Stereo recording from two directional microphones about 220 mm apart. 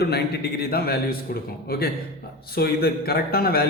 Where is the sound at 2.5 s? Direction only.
45° left (ahead or behind).